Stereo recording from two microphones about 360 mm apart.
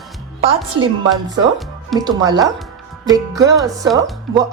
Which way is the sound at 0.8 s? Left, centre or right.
Centre.